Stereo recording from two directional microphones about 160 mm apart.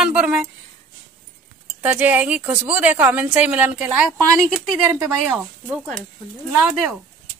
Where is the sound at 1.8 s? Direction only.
10° right (ahead or behind).